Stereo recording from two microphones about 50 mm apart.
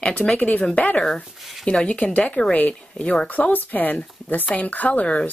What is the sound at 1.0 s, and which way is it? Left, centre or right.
Speech, centre.